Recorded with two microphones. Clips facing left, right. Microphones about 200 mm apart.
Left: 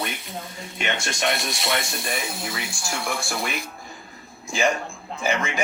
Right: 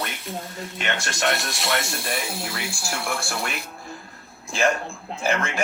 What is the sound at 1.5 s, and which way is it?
A man's voice, centre (ahead or behind).